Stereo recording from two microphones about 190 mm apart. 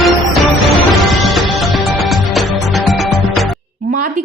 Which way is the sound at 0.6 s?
Centre (ahead or behind).